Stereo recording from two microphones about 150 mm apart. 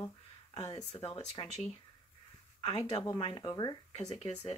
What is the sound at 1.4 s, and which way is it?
Speech, 30° left (ahead or behind).